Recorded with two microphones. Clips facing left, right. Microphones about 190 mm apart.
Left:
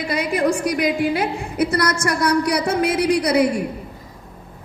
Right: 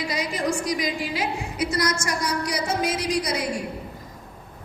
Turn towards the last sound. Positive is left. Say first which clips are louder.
# left 8 dB
turn(degrees=60)  # may be behind; listen again after turning